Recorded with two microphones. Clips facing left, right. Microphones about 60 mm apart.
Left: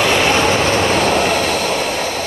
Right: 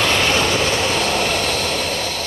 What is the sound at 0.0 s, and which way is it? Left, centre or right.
Train, centre.